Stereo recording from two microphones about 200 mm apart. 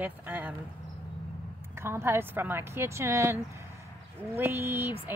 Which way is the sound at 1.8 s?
15° right (ahead or behind).